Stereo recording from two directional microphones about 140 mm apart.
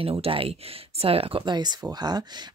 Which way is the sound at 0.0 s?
40° right (ahead or behind).